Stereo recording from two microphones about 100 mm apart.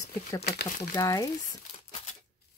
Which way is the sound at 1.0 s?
35° left (ahead or behind).